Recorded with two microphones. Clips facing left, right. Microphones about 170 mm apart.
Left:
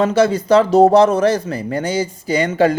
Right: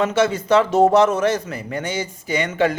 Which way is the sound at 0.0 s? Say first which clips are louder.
Left 4 dB; 35° left (ahead or behind).